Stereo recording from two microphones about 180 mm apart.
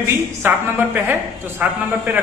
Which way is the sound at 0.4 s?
10° right (ahead or behind).